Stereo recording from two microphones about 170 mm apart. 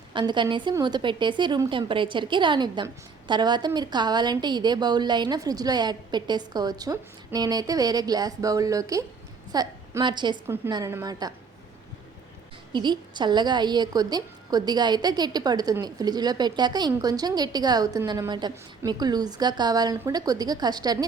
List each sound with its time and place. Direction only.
0.1 s a woman's voice: 25° right (ahead or behind)
12.7 s a woman's voice: 25° right (ahead or behind)